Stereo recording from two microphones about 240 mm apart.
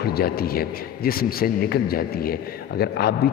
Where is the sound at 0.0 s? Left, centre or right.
Left.